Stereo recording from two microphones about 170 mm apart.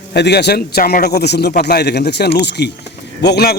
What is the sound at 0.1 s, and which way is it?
A man's voice, 80° left.